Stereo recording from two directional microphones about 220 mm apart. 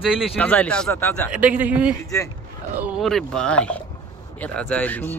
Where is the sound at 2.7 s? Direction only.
5° right (ahead or behind).